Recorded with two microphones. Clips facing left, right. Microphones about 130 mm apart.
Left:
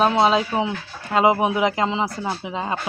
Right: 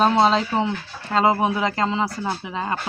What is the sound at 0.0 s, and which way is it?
Speech, 5° left (ahead or behind).